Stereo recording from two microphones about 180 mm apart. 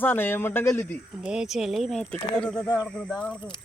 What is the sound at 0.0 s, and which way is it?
Speech, 10° left (ahead or behind).